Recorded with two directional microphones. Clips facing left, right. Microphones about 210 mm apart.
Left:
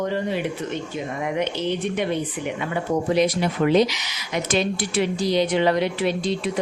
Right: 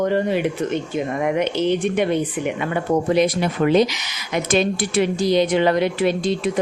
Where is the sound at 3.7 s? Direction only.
50° right (ahead or behind).